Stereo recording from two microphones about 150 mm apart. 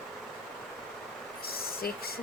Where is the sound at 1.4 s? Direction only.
90° left.